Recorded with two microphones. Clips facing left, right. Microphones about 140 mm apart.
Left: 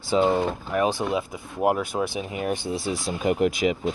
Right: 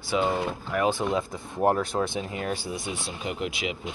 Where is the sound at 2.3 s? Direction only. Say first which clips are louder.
Left 4 dB; 20° left (ahead or behind); by 3.9 s 45° left (ahead or behind).